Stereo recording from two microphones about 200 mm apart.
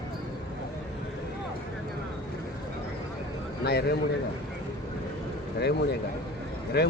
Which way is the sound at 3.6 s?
55° left (ahead or behind).